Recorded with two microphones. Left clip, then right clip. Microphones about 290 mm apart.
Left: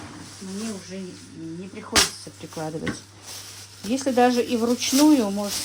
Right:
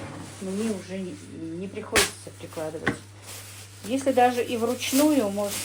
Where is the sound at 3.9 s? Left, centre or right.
Left.